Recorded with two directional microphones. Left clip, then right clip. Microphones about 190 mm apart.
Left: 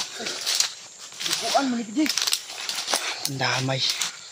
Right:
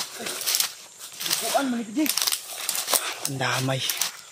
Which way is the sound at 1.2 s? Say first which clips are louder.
Left 2 dB; 30° right (ahead or behind).